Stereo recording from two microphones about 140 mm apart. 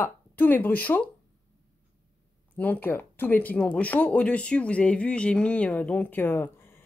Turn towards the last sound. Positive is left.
turn(degrees=15)  # may be behind; listen again after turning